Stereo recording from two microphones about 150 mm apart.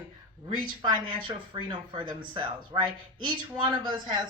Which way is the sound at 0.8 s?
30° right (ahead or behind).